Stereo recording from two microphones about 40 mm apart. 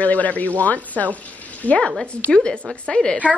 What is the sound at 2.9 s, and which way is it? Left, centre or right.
Speech, left.